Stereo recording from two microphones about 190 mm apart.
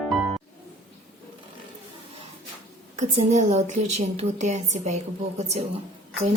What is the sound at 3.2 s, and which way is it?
A woman's voice, 35° right (ahead or behind).